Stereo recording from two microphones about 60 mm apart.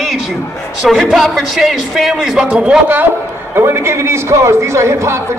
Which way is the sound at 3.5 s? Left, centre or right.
Right.